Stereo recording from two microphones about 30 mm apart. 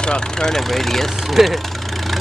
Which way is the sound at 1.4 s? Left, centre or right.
Centre.